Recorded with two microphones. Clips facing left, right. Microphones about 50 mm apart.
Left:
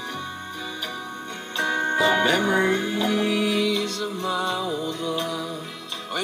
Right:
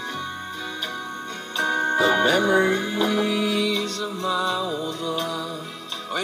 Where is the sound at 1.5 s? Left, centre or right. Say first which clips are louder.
Right 1 dB; left.